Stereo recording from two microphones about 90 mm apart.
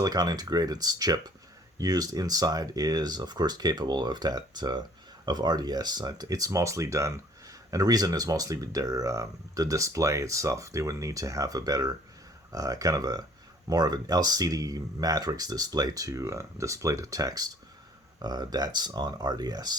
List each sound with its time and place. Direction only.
0.0 s speech: 45° right (ahead or behind)